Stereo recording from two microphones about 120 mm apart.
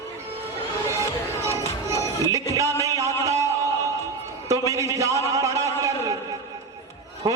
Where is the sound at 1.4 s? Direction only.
25° right (ahead or behind).